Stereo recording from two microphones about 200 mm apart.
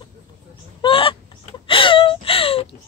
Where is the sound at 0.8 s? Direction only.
25° left (ahead or behind).